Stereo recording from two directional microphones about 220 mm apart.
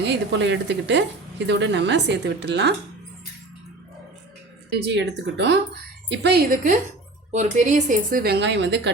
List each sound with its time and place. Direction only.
0.0 s speech: 55° right (ahead or behind)
4.7 s speech: 55° right (ahead or behind)